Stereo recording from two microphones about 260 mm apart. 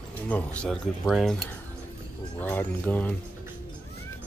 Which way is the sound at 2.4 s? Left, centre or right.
Centre.